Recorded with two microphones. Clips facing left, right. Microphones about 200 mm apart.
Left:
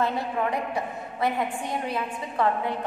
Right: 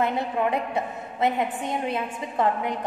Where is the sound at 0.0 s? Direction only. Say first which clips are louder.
Right 2 dB; 25° right (ahead or behind).